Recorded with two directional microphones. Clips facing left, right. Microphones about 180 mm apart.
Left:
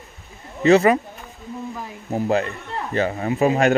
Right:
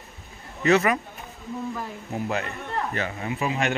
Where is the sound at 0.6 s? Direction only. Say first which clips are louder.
Left 6 dB; 30° left (ahead or behind).